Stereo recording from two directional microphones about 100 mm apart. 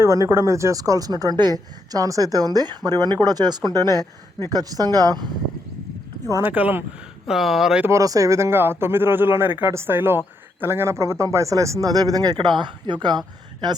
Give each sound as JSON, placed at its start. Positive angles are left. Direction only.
{"t": 0.0, "sound": "speech", "side_deg": -30}
{"t": 6.3, "sound": "speech", "side_deg": -20}
{"t": 7.3, "sound": "speech", "side_deg": 0}
{"t": 7.9, "sound": "speech", "side_deg": -35}